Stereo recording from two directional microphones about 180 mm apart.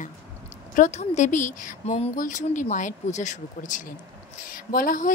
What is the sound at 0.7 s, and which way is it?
Speech, 40° left (ahead or behind).